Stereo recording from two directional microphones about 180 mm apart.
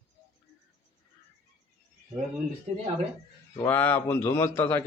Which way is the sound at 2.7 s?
40° right (ahead or behind).